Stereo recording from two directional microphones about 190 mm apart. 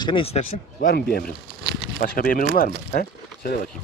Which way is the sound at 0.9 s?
55° left (ahead or behind).